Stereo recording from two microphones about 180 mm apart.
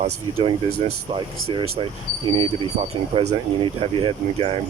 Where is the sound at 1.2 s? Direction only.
25° right (ahead or behind).